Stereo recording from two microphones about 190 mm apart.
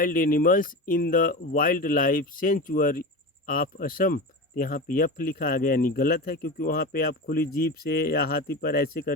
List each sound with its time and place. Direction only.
0.0 s speech: 50° left (ahead or behind)